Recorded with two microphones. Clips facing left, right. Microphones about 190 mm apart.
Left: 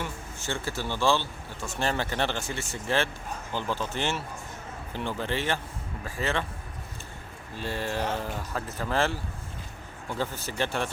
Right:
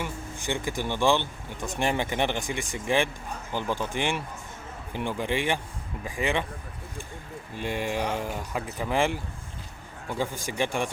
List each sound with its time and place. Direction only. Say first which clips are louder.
0.0 s speech: right 2 dB; 15° right (ahead or behind)
7.5 s speech: right 2 dB; 15° right (ahead or behind)
10.2 s speech: right 2 dB; 15° right (ahead or behind)